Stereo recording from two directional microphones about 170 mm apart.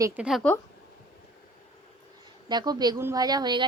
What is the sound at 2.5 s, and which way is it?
A woman's voice, 25° right (ahead or behind).